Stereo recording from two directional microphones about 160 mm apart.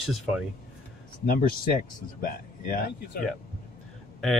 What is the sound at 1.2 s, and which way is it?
Speech, 65° left (ahead or behind).